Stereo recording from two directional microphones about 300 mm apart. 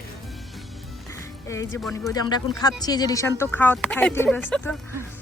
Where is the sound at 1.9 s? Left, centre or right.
Centre.